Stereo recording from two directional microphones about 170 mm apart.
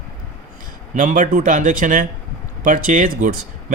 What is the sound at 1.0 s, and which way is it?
Speech, 50° right (ahead or behind).